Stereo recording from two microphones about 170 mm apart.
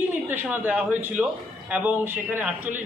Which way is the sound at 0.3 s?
10° right (ahead or behind).